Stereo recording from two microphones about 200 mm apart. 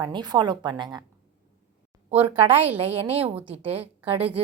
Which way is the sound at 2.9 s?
30° right (ahead or behind).